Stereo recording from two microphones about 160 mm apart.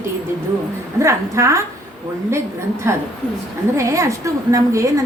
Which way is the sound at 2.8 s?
15° right (ahead or behind).